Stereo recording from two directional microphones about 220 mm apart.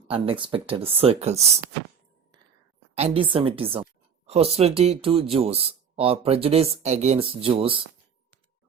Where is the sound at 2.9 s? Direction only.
25° right (ahead or behind).